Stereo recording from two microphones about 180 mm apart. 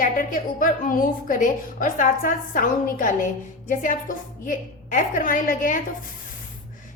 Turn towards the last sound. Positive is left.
turn(degrees=50)  # may be behind; listen again after turning